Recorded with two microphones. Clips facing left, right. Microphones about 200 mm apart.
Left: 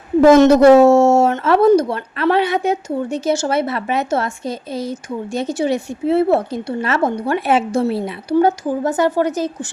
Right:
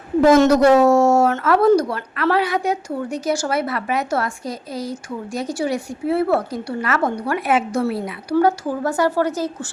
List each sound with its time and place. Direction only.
0.3 s speech: 25° left (ahead or behind)